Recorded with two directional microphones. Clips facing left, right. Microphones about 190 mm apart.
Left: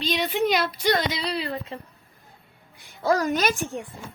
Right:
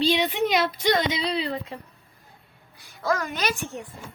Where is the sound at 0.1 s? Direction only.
Centre (ahead or behind).